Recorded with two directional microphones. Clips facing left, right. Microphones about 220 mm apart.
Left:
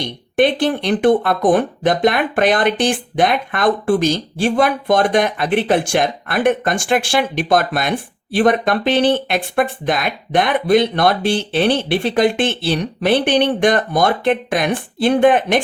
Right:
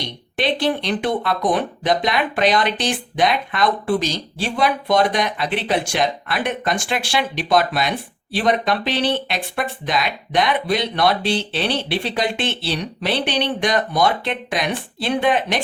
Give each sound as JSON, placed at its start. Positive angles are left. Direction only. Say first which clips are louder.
{"t": 0.0, "sound": "speech", "louder": "left 8 dB", "side_deg": 50}